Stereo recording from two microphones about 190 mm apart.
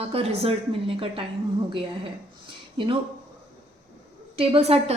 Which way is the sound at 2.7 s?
25° right (ahead or behind).